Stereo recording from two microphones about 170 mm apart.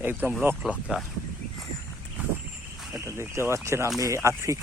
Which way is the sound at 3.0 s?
15° right (ahead or behind).